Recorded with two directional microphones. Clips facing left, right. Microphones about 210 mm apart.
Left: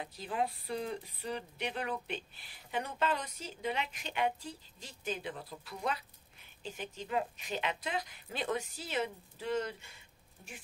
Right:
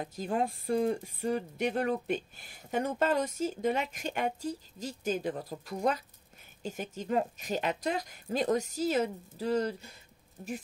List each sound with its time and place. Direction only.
0.0 s a woman's voice: 45° right (ahead or behind)